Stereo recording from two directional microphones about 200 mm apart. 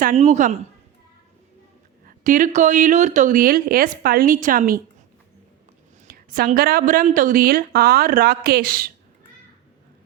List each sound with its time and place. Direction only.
0.0 s speech: 35° right (ahead or behind)
2.0 s speech: 40° right (ahead or behind)
6.1 s a woman's voice: 45° right (ahead or behind)